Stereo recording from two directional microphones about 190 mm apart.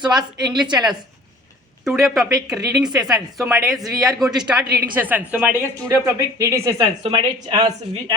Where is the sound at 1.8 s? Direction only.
Centre (ahead or behind); by 8.1 s 30° right (ahead or behind).